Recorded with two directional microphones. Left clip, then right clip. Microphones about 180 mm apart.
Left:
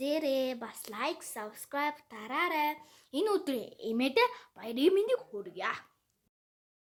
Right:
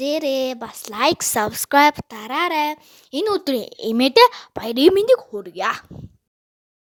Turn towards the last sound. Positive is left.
turn(degrees=-50)  # may be behind; listen again after turning